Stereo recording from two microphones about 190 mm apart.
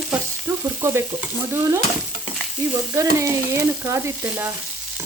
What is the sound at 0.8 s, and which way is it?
Frying, 10° right (ahead or behind).